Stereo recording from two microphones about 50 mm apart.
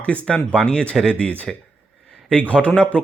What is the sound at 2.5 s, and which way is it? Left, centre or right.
Speech, left.